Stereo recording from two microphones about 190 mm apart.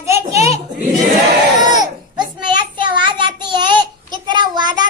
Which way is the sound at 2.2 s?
25° right (ahead or behind).